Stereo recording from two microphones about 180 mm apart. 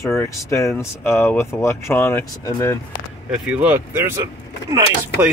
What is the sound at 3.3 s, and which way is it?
Speech, 5° right (ahead or behind).